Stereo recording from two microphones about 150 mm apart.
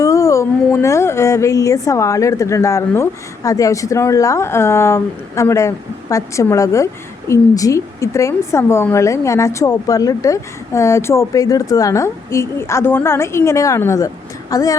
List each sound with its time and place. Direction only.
0.0 s a woman's voice: 20° left (ahead or behind)